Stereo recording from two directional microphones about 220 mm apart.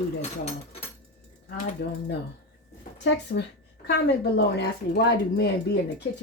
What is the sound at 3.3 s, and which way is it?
Speech, 40° left (ahead or behind).